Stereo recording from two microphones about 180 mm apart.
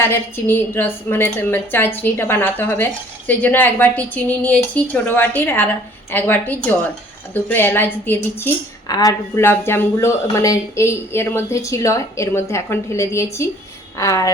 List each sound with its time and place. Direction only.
0.0 s speech: 15° left (ahead or behind)